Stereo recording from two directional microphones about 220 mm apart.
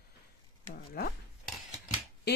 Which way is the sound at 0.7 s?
40° left (ahead or behind).